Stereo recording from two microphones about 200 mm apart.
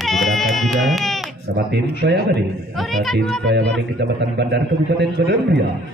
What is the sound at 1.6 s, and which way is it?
Speech, 50° right (ahead or behind).